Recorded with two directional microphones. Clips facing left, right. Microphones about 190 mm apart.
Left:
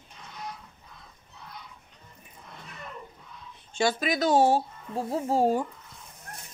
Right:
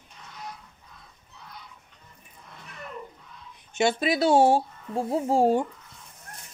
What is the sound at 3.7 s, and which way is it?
Speech, 25° right (ahead or behind).